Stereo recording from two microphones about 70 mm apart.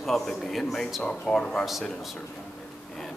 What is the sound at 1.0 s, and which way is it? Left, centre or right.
Speech, centre.